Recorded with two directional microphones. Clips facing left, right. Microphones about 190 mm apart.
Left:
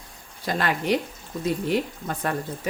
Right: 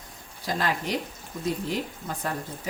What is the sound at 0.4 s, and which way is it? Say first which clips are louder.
Speech: left 4 dB; 65° left (ahead or behind).